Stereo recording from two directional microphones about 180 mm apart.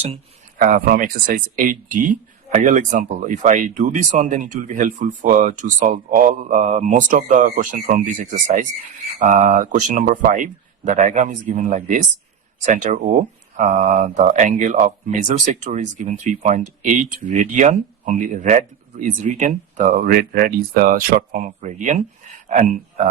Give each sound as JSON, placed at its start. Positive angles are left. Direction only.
{"t": 0.6, "sound": "speech", "side_deg": -50}